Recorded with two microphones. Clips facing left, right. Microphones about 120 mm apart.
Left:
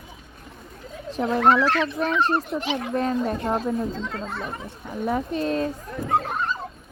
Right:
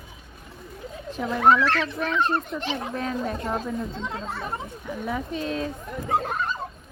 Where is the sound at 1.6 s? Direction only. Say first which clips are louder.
Left 2 dB; 15° left (ahead or behind).